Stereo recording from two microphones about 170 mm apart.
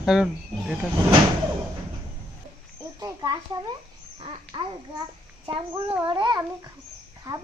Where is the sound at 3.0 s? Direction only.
25° right (ahead or behind).